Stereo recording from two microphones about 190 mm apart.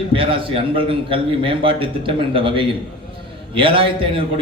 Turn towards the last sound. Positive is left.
turn(degrees=-30)  # may be behind; listen again after turning